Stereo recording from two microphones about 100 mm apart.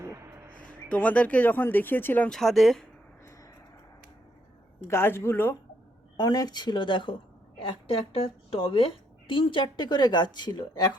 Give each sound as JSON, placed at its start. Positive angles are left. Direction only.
{"t": 0.0, "sound": "a sound", "side_deg": -30}
{"t": 0.7, "sound": "speech", "side_deg": 15}
{"t": 2.3, "sound": "a woman's voice", "side_deg": 0}
{"t": 4.9, "sound": "speech", "side_deg": 25}
{"t": 6.1, "sound": "a woman's voice", "side_deg": 40}